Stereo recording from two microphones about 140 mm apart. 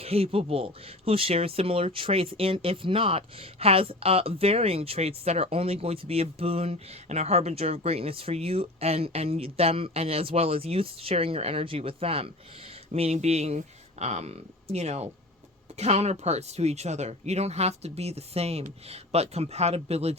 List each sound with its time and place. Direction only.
0.0 s speech: 45° right (ahead or behind)